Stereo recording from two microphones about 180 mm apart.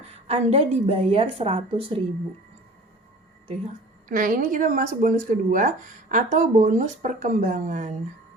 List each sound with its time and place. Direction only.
0.0 s a woman's voice: 35° right (ahead or behind)
4.1 s speech: 50° right (ahead or behind)